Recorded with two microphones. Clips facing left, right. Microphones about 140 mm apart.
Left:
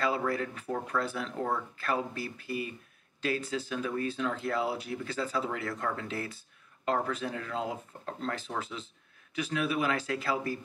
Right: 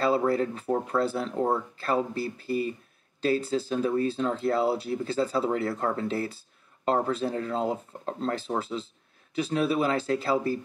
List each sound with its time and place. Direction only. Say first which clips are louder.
0.0 s speech: right 6 dB; 30° right (ahead or behind)